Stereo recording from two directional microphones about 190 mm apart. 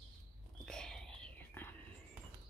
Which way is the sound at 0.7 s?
5° left (ahead or behind).